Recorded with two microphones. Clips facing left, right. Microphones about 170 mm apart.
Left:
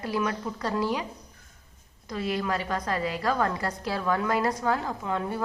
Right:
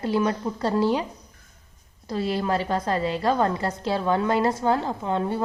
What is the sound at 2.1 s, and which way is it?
A woman's voice, 30° right (ahead or behind).